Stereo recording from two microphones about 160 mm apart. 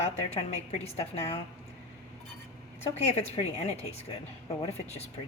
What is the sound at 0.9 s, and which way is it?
Speech, 40° left (ahead or behind).